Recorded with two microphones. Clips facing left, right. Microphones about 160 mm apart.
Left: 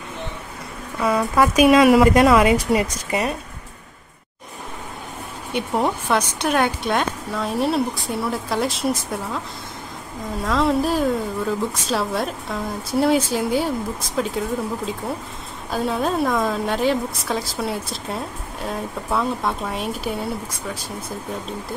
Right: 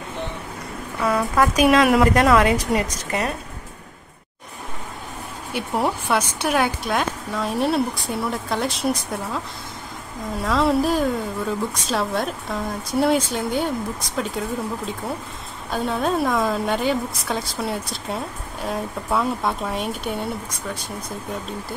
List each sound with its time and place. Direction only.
1.0 s a woman's voice: 5° left (ahead or behind)
5.5 s a woman's voice: 5° right (ahead or behind)
10.4 s a woman's voice: centre (ahead or behind)
15.7 s a woman's voice: centre (ahead or behind)